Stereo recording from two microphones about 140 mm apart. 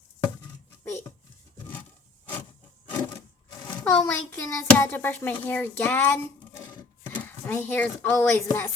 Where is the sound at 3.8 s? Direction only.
10° left (ahead or behind).